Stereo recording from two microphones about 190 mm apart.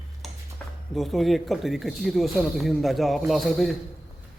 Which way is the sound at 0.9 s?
Centre (ahead or behind).